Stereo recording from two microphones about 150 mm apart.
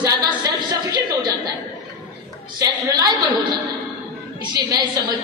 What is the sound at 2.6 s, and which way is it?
Speech, 25° right (ahead or behind).